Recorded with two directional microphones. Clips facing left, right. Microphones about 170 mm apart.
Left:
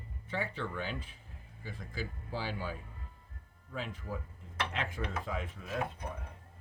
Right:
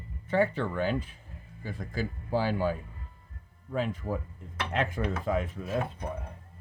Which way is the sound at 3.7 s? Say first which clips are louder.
Right 9 dB; 50° right (ahead or behind).